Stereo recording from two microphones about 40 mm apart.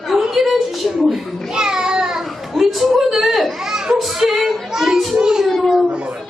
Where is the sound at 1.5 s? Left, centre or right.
Centre.